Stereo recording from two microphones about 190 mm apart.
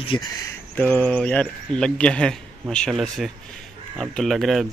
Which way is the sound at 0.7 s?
5° left (ahead or behind).